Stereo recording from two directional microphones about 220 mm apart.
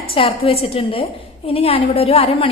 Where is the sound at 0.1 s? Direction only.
25° left (ahead or behind).